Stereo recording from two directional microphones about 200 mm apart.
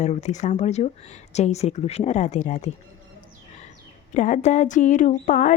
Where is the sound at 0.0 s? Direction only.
35° left (ahead or behind).